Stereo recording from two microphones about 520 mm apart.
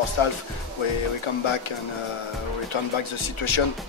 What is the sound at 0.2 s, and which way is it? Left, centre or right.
Speech, left.